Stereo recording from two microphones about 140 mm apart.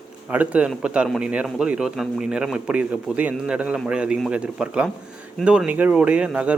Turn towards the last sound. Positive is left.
turn(degrees=-10)  # may be behind; listen again after turning